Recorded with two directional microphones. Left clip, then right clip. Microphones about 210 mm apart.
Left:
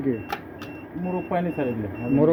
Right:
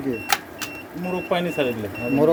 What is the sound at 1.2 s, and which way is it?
Speech, 50° right (ahead or behind).